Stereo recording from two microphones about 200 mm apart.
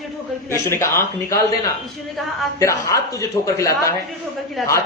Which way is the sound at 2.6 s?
15° left (ahead or behind).